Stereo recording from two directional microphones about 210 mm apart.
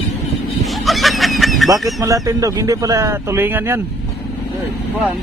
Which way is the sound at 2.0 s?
15° right (ahead or behind).